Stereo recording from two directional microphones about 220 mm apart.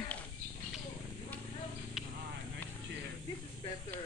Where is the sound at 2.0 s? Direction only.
Centre (ahead or behind).